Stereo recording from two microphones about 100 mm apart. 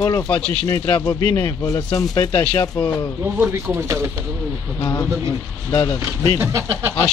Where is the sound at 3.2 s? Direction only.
20° right (ahead or behind).